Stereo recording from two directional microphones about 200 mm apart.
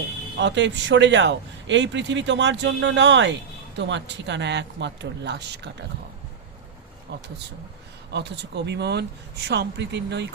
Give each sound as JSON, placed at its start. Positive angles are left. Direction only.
{"t": 0.3, "sound": "a man's voice", "side_deg": -65}
{"t": 7.1, "sound": "a man's voice", "side_deg": -55}